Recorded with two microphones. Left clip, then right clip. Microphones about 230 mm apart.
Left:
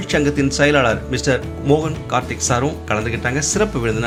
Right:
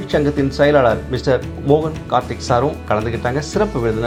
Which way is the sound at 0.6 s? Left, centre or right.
Left.